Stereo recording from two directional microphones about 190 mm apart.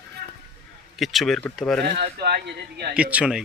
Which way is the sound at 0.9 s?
Centre (ahead or behind).